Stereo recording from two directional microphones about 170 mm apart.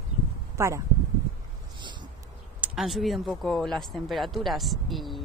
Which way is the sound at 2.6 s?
Centre (ahead or behind).